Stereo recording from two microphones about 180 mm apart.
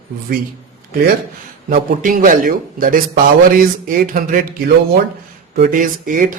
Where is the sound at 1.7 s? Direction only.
50° right (ahead or behind).